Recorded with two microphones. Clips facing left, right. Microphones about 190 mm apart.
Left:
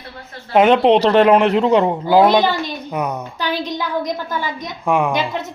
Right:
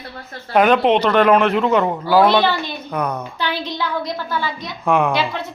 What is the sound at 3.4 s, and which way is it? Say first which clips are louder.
Speech: left 3 dB; 40° left (ahead or behind).